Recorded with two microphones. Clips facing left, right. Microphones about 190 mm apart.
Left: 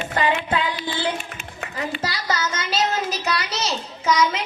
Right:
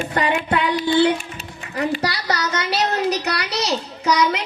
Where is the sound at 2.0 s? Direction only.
65° right (ahead or behind).